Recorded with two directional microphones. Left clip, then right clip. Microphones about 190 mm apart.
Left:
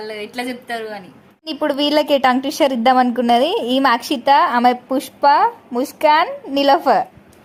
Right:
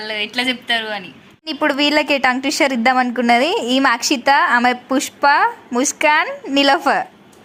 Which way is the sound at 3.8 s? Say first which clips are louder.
Even; 10° left (ahead or behind).